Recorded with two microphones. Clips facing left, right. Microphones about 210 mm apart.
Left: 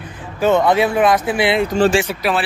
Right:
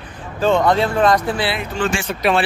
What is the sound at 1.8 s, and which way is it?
Speech, 40° left (ahead or behind).